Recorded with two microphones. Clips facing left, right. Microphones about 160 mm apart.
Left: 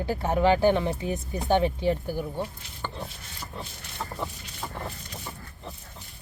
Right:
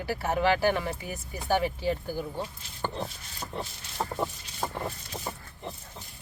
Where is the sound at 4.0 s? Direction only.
40° right (ahead or behind).